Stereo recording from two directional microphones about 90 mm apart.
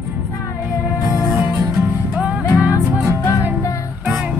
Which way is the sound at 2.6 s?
20° right (ahead or behind).